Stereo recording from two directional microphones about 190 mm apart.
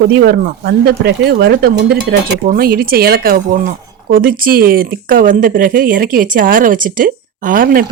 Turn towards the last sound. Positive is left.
turn(degrees=-50)  # may be behind; listen again after turning